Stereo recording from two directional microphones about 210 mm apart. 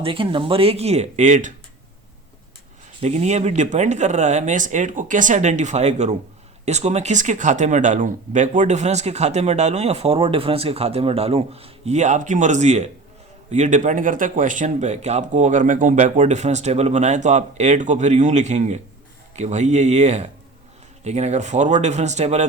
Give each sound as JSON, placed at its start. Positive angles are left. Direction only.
{"t": 0.0, "sound": "speech", "side_deg": -25}
{"t": 3.0, "sound": "speech", "side_deg": -30}